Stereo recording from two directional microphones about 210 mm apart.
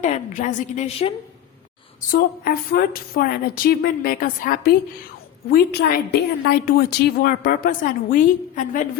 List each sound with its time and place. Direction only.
0.0 s a woman's voice: 35° left (ahead or behind)
2.0 s a woman's voice: 45° left (ahead or behind)